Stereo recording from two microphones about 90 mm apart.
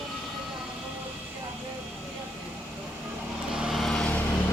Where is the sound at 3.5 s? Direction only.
5° right (ahead or behind).